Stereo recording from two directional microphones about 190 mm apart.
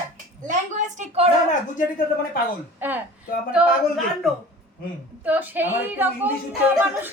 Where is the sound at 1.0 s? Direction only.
30° right (ahead or behind).